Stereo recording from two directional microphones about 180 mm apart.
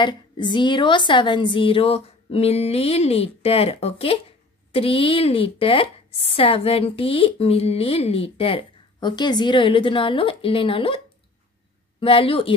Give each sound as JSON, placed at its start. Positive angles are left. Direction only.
{"t": 0.0, "sound": "a woman's voice", "side_deg": 25}
{"t": 12.0, "sound": "a woman's voice", "side_deg": 30}